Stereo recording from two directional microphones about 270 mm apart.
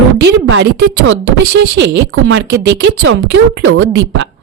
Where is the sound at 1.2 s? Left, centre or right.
Right.